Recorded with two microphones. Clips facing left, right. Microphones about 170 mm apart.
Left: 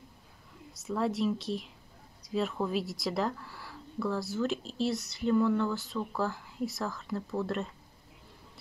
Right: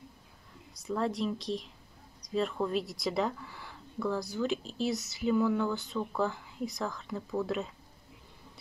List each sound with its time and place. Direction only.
0.8 s speech: centre (ahead or behind)